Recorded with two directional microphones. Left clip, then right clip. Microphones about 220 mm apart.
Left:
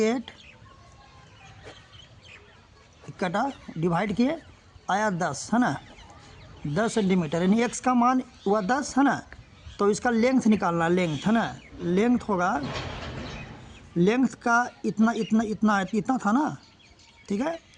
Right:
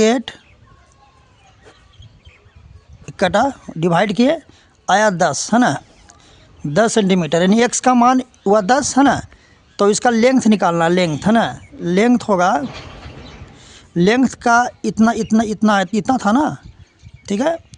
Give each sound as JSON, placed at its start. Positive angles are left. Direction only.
{"t": 0.0, "sound": "speech", "side_deg": -50}
{"t": 3.1, "sound": "speech", "side_deg": -45}
{"t": 13.9, "sound": "speech", "side_deg": -45}